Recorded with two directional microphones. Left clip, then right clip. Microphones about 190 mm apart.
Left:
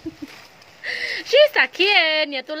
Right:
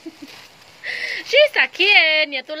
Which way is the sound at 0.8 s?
25° left (ahead or behind).